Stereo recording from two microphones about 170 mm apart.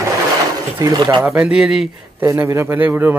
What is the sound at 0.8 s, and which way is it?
Speech, 25° right (ahead or behind).